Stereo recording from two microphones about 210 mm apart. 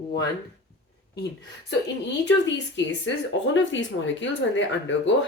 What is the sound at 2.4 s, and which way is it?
Speech, 60° left (ahead or behind).